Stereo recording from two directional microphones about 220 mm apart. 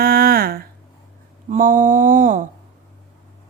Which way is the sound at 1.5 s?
35° right (ahead or behind).